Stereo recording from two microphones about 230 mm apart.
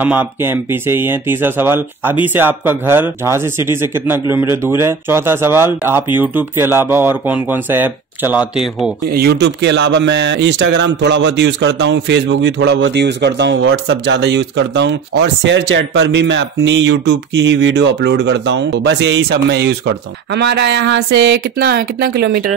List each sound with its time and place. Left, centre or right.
0.0 s speech: centre
9.1 s speech: right